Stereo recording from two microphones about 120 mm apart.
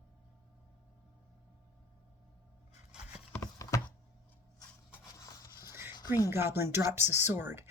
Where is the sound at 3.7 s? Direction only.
25° left (ahead or behind).